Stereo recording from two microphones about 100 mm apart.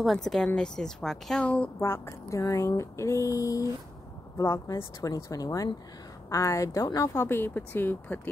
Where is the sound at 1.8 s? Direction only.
30° left (ahead or behind).